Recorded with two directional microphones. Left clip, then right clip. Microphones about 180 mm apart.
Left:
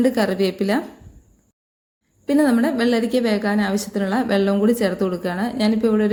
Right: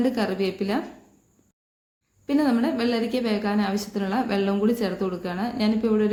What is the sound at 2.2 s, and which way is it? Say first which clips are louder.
A woman's voice: left 5 dB; 25° left (ahead or behind).